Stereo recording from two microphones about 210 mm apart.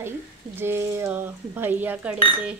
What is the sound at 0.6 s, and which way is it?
A woman's voice, 10° right (ahead or behind).